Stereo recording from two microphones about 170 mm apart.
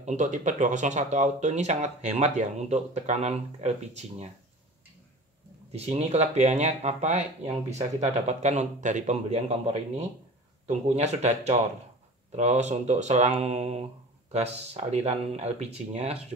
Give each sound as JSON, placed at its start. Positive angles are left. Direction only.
{"t": 0.0, "sound": "speech", "side_deg": -45}
{"t": 5.7, "sound": "speech", "side_deg": -40}